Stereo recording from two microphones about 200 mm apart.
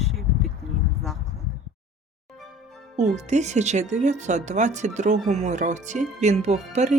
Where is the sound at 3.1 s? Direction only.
35° right (ahead or behind).